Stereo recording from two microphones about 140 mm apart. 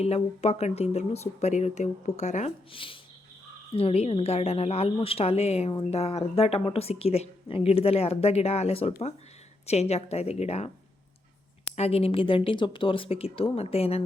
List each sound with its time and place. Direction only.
0.0 s speech: 50° left (ahead or behind)
2.7 s speech: 40° left (ahead or behind)
11.8 s speech: 45° left (ahead or behind)